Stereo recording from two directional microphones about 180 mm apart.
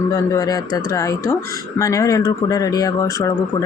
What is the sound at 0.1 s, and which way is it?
Speech, 20° left (ahead or behind).